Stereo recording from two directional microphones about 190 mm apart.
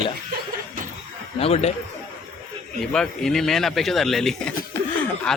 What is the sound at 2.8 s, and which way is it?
Speech, 5° left (ahead or behind).